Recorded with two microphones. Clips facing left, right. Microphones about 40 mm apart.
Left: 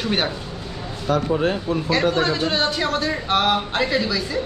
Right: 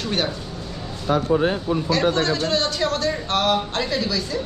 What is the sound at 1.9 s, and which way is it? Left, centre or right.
A man's voice, centre.